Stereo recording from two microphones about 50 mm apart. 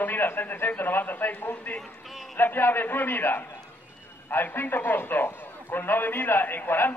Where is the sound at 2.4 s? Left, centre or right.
Left.